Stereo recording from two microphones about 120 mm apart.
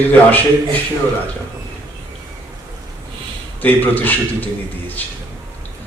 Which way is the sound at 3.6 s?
15° left (ahead or behind).